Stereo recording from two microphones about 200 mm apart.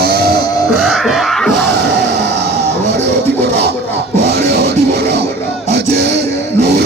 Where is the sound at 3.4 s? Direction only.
55° right (ahead or behind).